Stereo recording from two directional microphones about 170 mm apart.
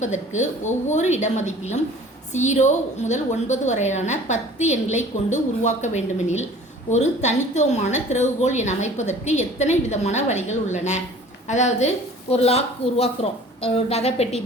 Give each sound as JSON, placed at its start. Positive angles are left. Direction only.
{"t": 0.0, "sound": "a woman's voice", "side_deg": 45}